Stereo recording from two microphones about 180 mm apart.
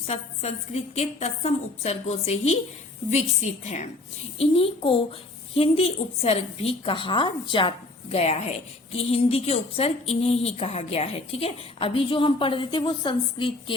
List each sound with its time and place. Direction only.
0.1 s a woman's voice: 35° left (ahead or behind)